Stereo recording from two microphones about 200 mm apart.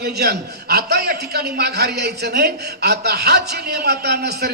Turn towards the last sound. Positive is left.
turn(degrees=-55)  # may be behind; listen again after turning